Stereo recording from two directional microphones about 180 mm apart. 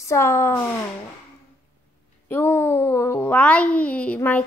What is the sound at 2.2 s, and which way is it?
A child's voice, 10° left (ahead or behind).